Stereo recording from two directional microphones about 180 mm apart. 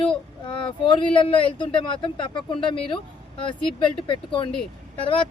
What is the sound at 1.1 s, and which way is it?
Speech, 30° left (ahead or behind).